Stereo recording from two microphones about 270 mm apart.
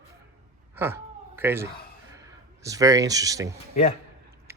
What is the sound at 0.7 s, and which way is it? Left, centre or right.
Cat, centre.